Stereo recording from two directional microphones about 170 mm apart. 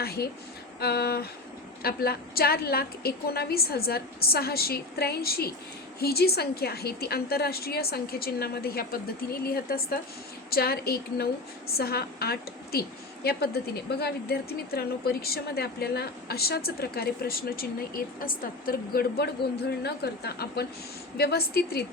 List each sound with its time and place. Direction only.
0.0 s a woman's voice: 65° left (ahead or behind)